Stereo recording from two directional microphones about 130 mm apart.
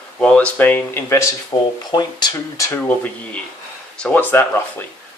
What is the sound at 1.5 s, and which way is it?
Speech, 35° left (ahead or behind).